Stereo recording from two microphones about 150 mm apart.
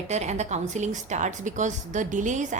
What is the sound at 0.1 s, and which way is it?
A woman's voice, 50° right (ahead or behind).